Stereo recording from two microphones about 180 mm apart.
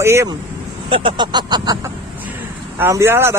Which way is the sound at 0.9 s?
25° right (ahead or behind).